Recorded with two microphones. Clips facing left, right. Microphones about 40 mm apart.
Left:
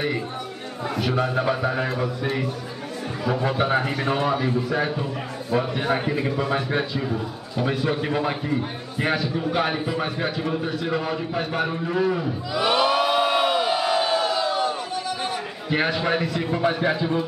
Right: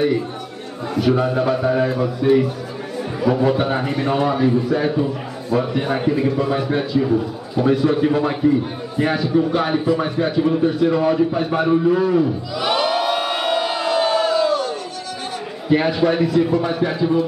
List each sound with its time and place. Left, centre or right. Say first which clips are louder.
0.9 s a man's voice: right 6 dB; centre
12.6 s crowd: right 1 dB; centre
15.9 s a man's voice: right 6 dB; centre
16.5 s a man's voice: right 3 dB; centre